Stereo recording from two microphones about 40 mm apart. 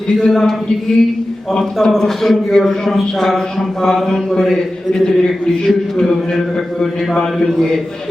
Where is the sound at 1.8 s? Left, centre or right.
Centre.